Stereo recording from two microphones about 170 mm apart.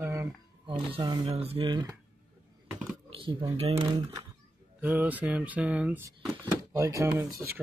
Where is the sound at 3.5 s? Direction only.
35° right (ahead or behind).